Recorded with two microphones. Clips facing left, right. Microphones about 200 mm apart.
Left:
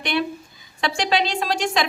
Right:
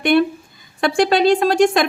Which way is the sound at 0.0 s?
50° right (ahead or behind).